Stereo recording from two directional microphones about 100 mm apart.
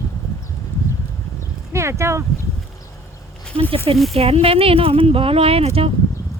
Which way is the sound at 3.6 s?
65° right (ahead or behind).